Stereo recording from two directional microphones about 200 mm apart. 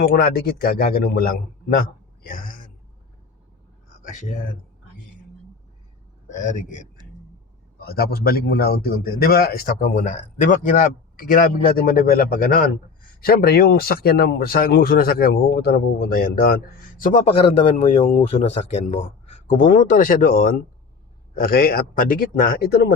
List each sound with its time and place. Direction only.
0.0 s a man's voice: 50° left (ahead or behind)
4.0 s speech: 40° left (ahead or behind)
6.2 s a man's voice: 35° left (ahead or behind)
7.8 s a man's voice: 50° left (ahead or behind)